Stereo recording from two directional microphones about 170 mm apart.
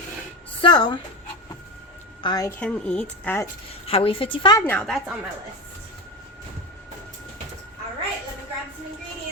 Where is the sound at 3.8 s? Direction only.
35° left (ahead or behind).